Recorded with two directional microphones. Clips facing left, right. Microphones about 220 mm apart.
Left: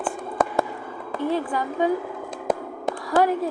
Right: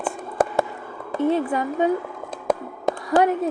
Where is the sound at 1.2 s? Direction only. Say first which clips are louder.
Right 4 dB; 25° right (ahead or behind).